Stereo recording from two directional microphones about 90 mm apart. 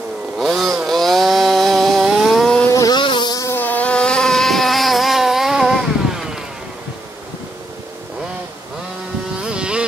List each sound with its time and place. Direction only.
0.4 s chainsaw: centre (ahead or behind)
2.7 s vehicle: 40° left (ahead or behind)
3.0 s insect: 60° left (ahead or behind)
3.5 s vehicle: 20° left (ahead or behind); by 6.4 s 5° right (ahead or behind)
9.4 s motorboat: 10° right (ahead or behind)